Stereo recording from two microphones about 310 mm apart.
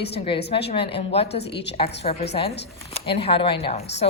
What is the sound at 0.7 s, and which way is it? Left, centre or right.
Speech, centre.